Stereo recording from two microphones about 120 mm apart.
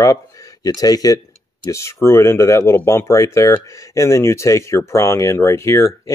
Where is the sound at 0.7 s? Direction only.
30° left (ahead or behind).